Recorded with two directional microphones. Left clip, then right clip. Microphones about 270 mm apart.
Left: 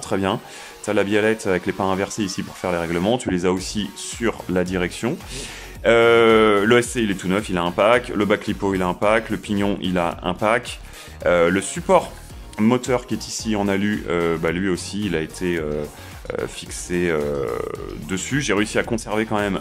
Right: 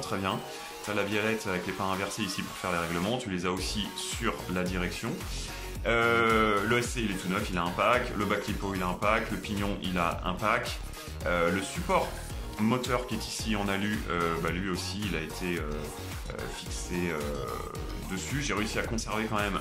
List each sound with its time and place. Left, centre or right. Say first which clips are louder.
0.1 s speech: left 11 dB; left
16.9 s speech: left 12 dB; left